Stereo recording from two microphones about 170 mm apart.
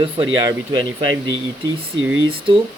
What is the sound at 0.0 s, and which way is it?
Speech, 25° right (ahead or behind).